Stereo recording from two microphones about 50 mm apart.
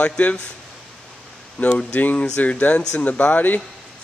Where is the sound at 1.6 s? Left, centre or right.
Left.